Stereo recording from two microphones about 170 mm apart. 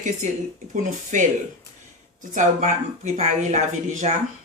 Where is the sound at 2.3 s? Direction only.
45° right (ahead or behind).